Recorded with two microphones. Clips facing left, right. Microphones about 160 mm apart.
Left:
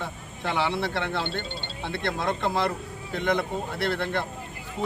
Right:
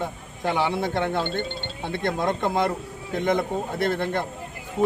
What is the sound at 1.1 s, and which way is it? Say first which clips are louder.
Speech: right 4 dB; 45° right (ahead or behind).